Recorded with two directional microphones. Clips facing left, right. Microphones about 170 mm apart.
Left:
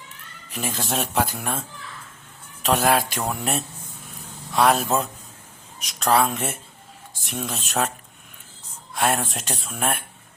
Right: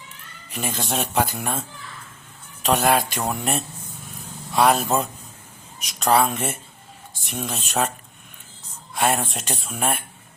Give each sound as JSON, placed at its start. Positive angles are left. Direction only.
{"t": 0.5, "sound": "speech", "side_deg": 0}
{"t": 2.6, "sound": "speech", "side_deg": 0}
{"t": 9.0, "sound": "speech", "side_deg": 0}